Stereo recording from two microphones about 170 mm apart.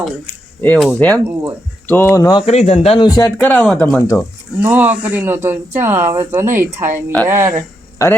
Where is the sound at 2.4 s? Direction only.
40° left (ahead or behind).